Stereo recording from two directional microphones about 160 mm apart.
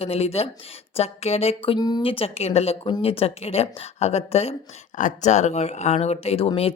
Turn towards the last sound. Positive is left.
turn(degrees=35)  # may be behind; listen again after turning